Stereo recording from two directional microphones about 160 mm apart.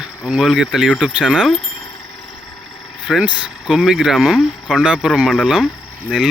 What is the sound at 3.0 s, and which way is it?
Speech, 5° right (ahead or behind).